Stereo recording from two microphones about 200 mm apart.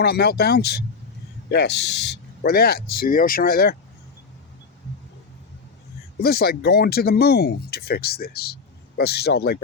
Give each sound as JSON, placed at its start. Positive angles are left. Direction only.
{"t": 0.0, "sound": "speech", "side_deg": 50}
{"t": 6.1, "sound": "speech", "side_deg": 50}